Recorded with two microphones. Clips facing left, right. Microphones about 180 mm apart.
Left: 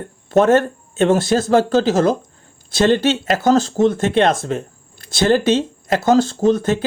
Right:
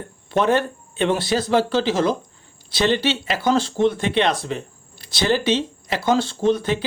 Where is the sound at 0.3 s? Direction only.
45° left (ahead or behind).